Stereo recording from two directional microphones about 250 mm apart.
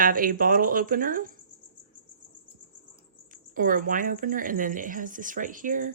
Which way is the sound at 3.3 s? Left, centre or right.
Right.